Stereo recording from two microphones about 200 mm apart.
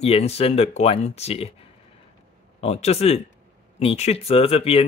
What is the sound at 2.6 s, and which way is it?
Speech, 30° left (ahead or behind).